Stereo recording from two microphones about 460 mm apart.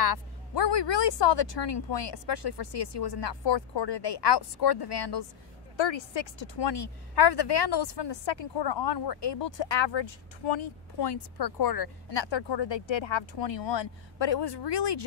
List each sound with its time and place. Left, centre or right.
0.0 s a woman's voice: left
5.8 s a woman's voice: left